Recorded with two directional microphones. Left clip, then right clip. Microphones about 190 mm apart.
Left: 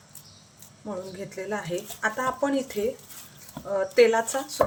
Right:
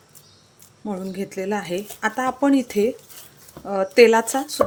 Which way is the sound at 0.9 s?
50° right (ahead or behind).